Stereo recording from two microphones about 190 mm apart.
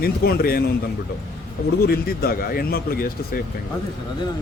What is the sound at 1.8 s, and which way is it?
Speech, 55° left (ahead or behind).